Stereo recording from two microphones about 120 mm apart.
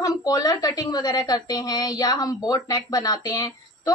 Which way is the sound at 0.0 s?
30° left (ahead or behind).